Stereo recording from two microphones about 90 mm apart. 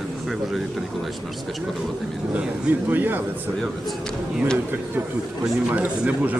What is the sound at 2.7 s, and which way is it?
Speech, 20° right (ahead or behind).